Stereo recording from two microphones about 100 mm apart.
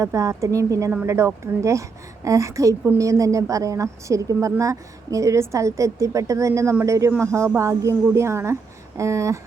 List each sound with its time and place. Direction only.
0.0 s a woman's voice: 30° right (ahead or behind)